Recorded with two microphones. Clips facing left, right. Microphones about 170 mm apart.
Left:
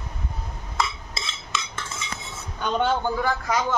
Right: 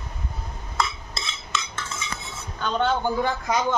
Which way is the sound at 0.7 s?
Centre (ahead or behind).